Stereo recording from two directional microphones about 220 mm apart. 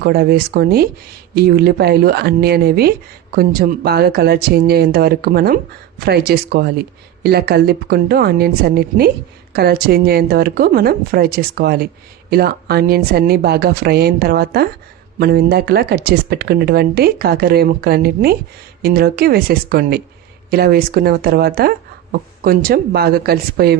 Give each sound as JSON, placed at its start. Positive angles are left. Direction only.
{"t": 0.0, "sound": "a woman's voice", "side_deg": -45}